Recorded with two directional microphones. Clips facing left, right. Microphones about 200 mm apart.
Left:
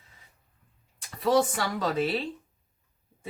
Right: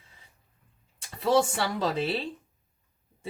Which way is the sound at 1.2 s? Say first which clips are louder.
Even; 25° right (ahead or behind).